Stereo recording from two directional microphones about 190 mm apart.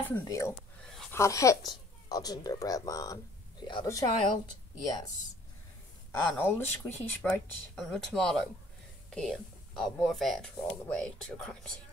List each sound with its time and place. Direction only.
0.1 s speech: 15° left (ahead or behind)
6.3 s speech: 5° left (ahead or behind)